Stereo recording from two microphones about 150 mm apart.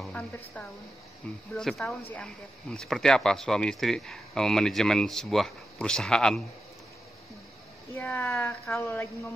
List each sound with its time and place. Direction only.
1.5 s speech: centre (ahead or behind)
7.9 s a woman's voice: 15° left (ahead or behind)